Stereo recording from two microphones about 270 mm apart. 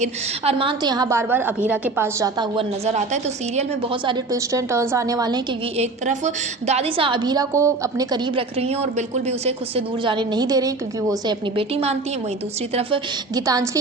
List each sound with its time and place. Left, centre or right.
0.0 s a woman's voice: right